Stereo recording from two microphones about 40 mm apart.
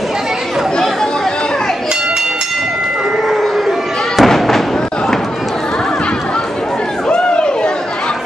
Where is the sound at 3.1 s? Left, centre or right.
Centre.